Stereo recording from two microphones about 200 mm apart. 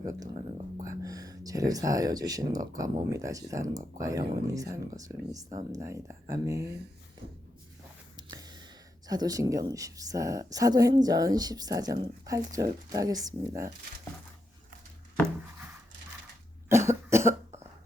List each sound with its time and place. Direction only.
0.9 s a woman's voice: 15° right (ahead or behind)
8.1 s a sound: 20° right (ahead or behind)
9.0 s a woman's voice: 20° right (ahead or behind)
16.6 s cough: 15° right (ahead or behind)